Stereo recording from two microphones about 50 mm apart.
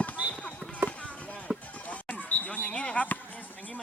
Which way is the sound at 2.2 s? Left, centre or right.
Left.